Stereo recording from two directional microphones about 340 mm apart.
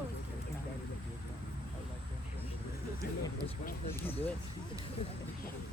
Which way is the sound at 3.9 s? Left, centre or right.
Centre.